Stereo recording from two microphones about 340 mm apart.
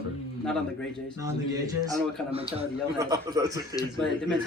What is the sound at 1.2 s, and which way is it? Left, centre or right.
A man's voice, centre.